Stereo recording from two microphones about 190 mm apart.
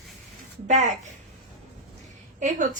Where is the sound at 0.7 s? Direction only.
40° right (ahead or behind).